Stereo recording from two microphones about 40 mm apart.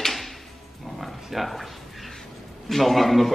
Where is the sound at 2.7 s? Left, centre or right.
Centre.